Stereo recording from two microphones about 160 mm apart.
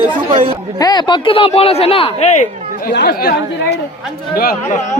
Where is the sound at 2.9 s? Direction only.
85° left.